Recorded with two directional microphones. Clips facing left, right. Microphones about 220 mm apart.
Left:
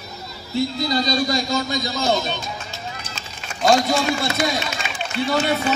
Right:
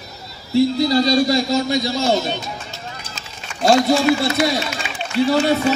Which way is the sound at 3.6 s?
25° right (ahead or behind).